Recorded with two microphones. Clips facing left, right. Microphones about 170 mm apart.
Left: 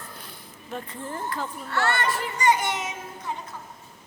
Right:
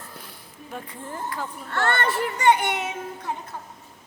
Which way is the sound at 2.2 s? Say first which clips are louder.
Right 4 dB; 60° right (ahead or behind).